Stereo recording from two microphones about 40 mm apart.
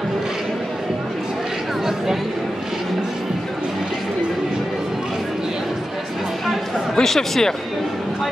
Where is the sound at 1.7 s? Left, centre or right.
Centre.